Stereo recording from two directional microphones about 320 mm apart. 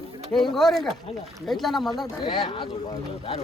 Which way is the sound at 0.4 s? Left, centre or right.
Centre.